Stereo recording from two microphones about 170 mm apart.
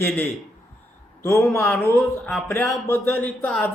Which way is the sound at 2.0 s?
Centre (ahead or behind).